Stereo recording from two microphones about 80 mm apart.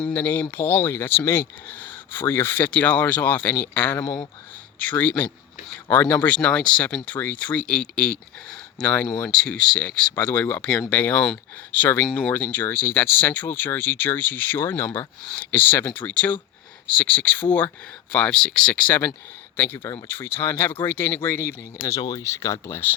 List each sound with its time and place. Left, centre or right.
0.1 s speech: left
10.6 s speech: centre
18.7 s speech: centre
22.2 s speech: left
22.6 s speech: left